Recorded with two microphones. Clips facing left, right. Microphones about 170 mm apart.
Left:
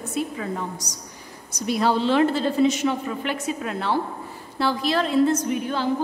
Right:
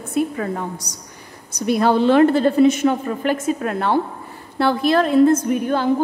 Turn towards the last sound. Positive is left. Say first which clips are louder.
# right 5 dB
turn(degrees=-50)  # may be behind; listen again after turning